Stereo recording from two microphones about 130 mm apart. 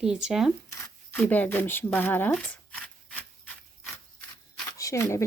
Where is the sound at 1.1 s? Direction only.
10° left (ahead or behind).